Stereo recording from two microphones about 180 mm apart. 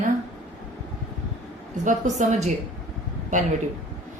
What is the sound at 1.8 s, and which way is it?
Speech, 40° right (ahead or behind).